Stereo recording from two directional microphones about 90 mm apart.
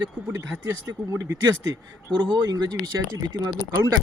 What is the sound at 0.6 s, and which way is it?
Speech, 25° right (ahead or behind).